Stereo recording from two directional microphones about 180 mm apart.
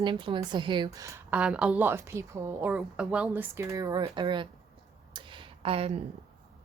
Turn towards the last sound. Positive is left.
turn(degrees=-30)  # may be behind; listen again after turning